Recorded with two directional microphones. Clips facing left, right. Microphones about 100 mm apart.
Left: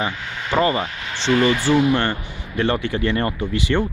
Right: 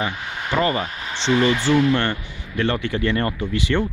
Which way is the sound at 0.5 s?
20° left (ahead or behind).